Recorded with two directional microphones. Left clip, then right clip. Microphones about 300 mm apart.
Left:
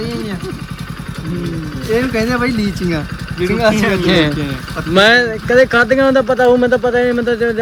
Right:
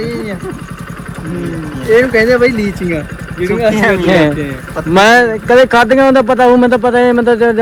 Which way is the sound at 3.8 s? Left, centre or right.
Centre.